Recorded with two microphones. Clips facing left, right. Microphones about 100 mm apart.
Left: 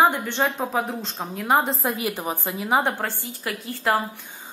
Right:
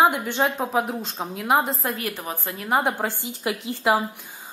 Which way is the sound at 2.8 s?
15° right (ahead or behind).